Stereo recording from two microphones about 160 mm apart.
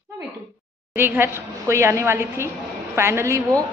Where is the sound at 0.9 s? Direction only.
15° right (ahead or behind).